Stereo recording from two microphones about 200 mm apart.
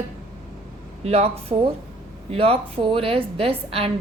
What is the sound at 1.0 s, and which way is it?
A woman's voice, 30° right (ahead or behind).